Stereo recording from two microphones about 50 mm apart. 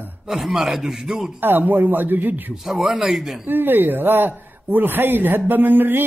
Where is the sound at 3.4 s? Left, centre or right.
Right.